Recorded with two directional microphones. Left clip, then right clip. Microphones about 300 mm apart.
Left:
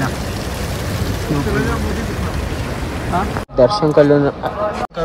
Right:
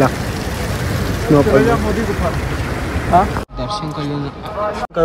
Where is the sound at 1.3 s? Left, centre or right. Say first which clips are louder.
Right 9 dB; centre.